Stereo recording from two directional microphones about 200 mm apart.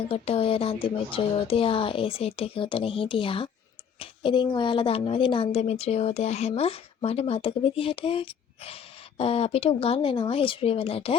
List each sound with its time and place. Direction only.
0.1 s a woman's voice: 30° left (ahead or behind)